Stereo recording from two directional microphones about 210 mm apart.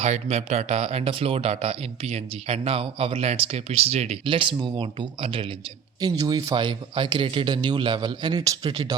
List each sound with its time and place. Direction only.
0.0 s speech: 30° right (ahead or behind)